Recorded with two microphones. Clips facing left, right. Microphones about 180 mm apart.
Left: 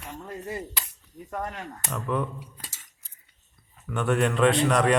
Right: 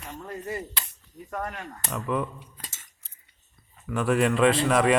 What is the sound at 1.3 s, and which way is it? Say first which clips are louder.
Speech: even; 20° left (ahead or behind).